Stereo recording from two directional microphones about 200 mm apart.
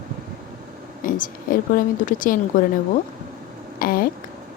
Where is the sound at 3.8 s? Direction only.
45° left (ahead or behind).